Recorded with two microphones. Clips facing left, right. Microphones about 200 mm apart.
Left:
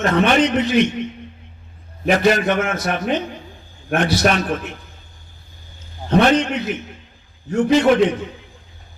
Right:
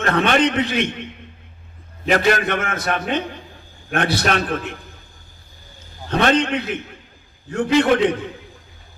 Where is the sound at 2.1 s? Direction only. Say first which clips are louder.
Left 2 dB; 55° right (ahead or behind).